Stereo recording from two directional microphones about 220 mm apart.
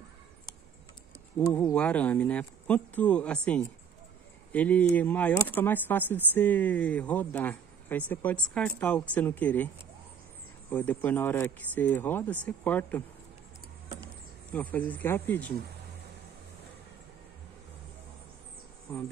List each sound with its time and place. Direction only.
1.5 s speech: 5° left (ahead or behind)
10.7 s speech: 10° left (ahead or behind)
14.5 s speech: 5° left (ahead or behind)